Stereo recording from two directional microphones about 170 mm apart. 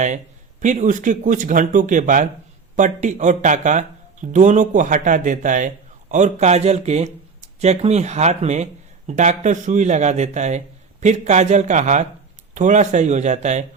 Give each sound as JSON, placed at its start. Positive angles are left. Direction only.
{"t": 0.6, "sound": "speech", "side_deg": -45}